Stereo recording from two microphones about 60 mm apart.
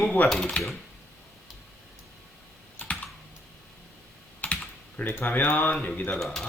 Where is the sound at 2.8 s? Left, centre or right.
Left.